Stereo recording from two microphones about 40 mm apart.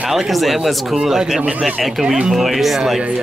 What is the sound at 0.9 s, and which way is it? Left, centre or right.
Speech, centre.